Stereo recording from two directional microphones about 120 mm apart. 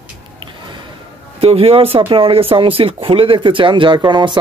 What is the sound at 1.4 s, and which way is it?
Speech, 55° right (ahead or behind).